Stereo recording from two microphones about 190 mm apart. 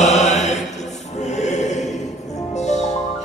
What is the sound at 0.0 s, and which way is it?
Mantra, 35° left (ahead or behind).